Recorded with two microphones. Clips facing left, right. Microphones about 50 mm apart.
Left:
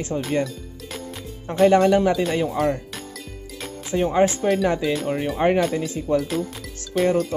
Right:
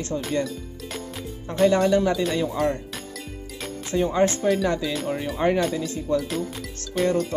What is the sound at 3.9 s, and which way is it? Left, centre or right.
Speech, centre.